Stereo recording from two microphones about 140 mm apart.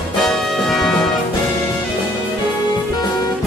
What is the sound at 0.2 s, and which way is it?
Music, centre (ahead or behind).